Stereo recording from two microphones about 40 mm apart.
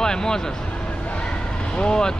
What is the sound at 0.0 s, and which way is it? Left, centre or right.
Speech, centre.